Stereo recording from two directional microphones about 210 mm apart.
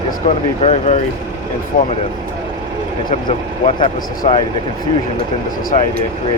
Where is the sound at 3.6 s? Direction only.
30° left (ahead or behind).